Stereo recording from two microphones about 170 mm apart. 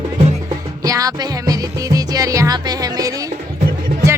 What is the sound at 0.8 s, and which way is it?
Music, 20° right (ahead or behind).